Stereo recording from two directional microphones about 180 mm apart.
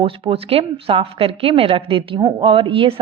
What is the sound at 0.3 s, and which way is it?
A woman's voice, 30° right (ahead or behind).